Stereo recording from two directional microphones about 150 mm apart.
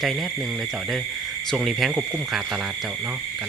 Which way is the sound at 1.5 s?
Centre (ahead or behind).